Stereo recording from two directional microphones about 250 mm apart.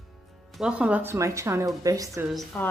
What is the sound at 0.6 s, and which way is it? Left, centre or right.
A woman's voice, centre.